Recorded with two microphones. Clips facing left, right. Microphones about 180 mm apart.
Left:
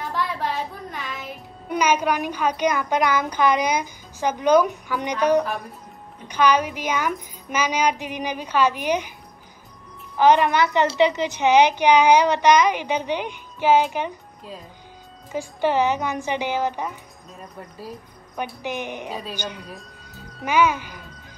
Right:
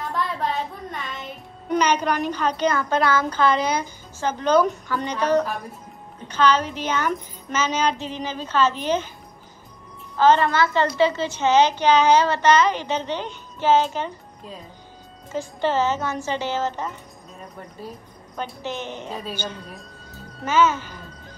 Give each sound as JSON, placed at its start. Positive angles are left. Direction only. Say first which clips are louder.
{"t": 0.0, "sound": "child singing", "louder": "even", "side_deg": 0}
{"t": 6.2, "sound": "a woman's voice", "louder": "left 1 dB", "side_deg": 15}
{"t": 10.1, "sound": "a woman's voice", "louder": "left 1 dB", "side_deg": 15}
{"t": 15.3, "sound": "a woman's voice", "louder": "left 1 dB", "side_deg": 15}
{"t": 18.3, "sound": "a woman's voice", "louder": "left 1 dB", "side_deg": 15}
{"t": 19.6, "sound": "speech", "louder": "left 1 dB", "side_deg": 0}
{"t": 20.4, "sound": "a woman's voice", "louder": "even", "side_deg": 15}